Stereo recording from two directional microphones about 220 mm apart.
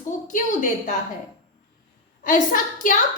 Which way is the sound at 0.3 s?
35° left (ahead or behind).